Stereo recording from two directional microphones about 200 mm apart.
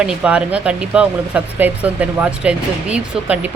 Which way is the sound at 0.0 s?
5° right (ahead or behind).